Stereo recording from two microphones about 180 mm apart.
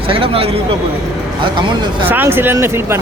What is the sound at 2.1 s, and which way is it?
Speech, 10° right (ahead or behind).